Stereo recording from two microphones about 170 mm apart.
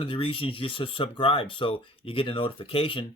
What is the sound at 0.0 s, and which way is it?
Speech, 30° left (ahead or behind).